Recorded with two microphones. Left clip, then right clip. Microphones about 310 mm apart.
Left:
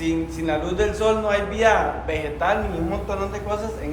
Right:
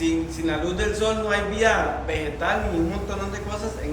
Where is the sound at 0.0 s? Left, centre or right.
Centre.